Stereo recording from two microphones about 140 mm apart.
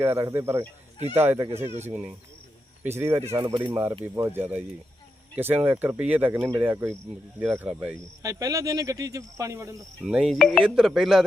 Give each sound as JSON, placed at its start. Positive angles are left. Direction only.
{"t": 0.0, "sound": "speech", "side_deg": -15}
{"t": 3.4, "sound": "speech", "side_deg": -35}
{"t": 4.0, "sound": "speech", "side_deg": -15}
{"t": 8.2, "sound": "speech", "side_deg": -25}
{"t": 10.0, "sound": "speech", "side_deg": -5}